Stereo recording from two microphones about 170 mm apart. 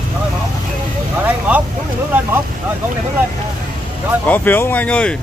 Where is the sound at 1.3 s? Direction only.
10° right (ahead or behind).